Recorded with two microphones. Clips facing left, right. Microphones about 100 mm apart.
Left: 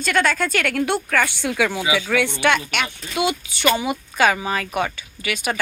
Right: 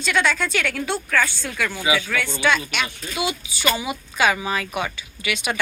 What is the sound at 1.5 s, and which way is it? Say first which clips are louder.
Speech: left 5 dB; 90° left.